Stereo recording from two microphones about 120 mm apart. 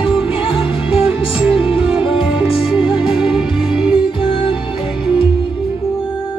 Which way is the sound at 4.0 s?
45° left (ahead or behind).